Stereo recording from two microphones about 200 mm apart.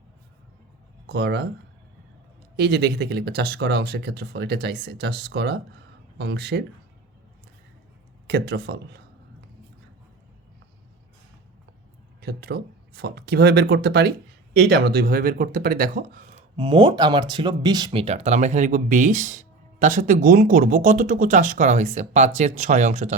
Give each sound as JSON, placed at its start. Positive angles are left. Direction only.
{"t": 1.0, "sound": "speech", "side_deg": -60}
{"t": 2.6, "sound": "speech", "side_deg": -55}
{"t": 8.3, "sound": "speech", "side_deg": -55}
{"t": 12.2, "sound": "speech", "side_deg": -55}
{"t": 16.6, "sound": "speech", "side_deg": -25}